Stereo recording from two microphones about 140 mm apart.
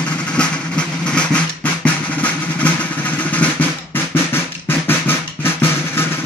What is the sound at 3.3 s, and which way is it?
Drum, 10° left (ahead or behind).